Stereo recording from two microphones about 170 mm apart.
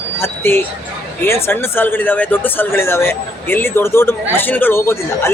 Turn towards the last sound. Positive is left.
turn(degrees=15)  # may be behind; listen again after turning